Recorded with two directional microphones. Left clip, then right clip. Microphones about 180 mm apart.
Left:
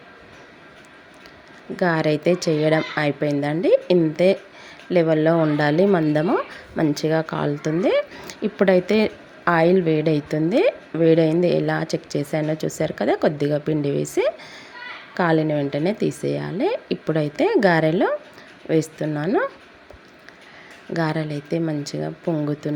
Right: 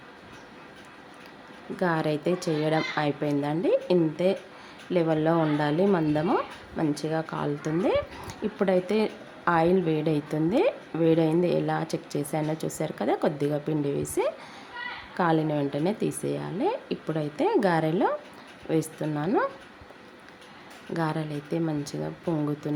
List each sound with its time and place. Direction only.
1.7 s a woman's voice: 20° left (ahead or behind)
20.9 s a woman's voice: 20° left (ahead or behind)